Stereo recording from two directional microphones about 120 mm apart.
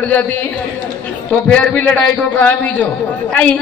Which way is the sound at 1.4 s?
10° left (ahead or behind).